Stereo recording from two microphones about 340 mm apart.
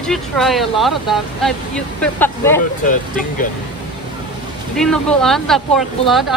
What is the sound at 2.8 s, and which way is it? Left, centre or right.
Speech, left.